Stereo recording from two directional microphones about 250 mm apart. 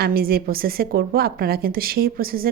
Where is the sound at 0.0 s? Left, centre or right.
Right.